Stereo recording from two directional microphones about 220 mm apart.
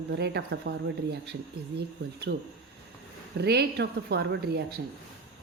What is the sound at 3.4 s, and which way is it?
A woman's voice, 50° right (ahead or behind).